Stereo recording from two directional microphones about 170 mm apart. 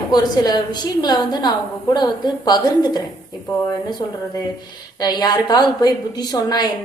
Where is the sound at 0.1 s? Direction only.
25° left (ahead or behind).